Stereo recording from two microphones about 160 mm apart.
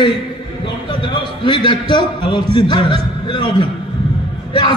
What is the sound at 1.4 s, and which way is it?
A man's voice, 30° left (ahead or behind).